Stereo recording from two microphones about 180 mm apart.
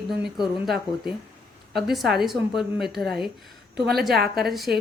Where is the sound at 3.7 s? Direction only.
60° right (ahead or behind).